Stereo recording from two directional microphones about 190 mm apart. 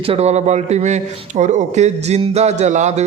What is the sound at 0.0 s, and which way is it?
A man's voice, 30° right (ahead or behind).